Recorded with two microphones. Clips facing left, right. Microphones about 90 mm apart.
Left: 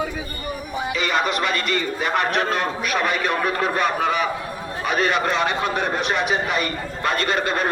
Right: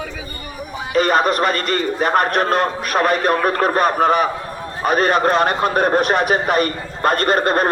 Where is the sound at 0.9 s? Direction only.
45° right (ahead or behind).